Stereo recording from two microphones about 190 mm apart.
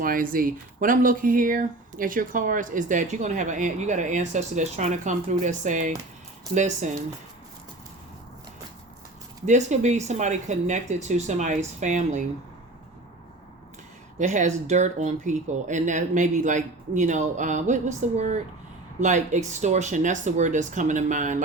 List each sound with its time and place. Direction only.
0.0 s speech: 50° right (ahead or behind)
9.5 s speech: 40° right (ahead or behind)
14.2 s speech: 40° right (ahead or behind)